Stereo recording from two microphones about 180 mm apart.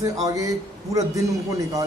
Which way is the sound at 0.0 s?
20° right (ahead or behind).